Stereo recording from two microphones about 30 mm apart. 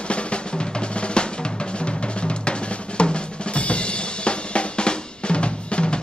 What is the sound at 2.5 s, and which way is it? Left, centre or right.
Drum, left.